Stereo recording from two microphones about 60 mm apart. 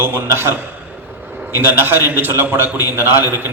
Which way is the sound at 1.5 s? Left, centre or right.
Right.